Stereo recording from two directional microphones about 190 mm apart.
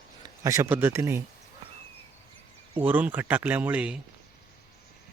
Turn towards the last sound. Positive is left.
turn(degrees=-5)  # may be behind; listen again after turning